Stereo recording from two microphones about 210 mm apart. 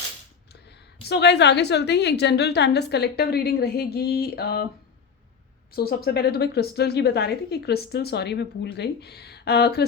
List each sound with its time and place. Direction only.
1.0 s a woman's voice: 55° left (ahead or behind)
5.7 s a woman's voice: 45° left (ahead or behind)